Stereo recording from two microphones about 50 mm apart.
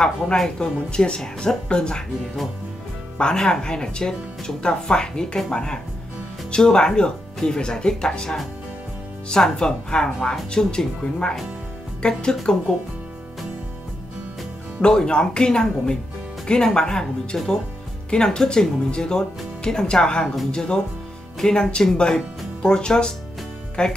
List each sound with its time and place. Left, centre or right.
0.0 s speech: centre
3.2 s speech: centre
14.8 s speech: centre